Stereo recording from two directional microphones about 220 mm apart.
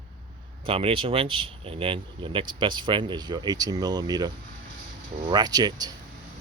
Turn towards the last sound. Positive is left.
turn(degrees=-15)  # may be behind; listen again after turning